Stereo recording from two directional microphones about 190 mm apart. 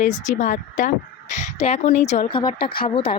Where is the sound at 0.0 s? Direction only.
40° left (ahead or behind).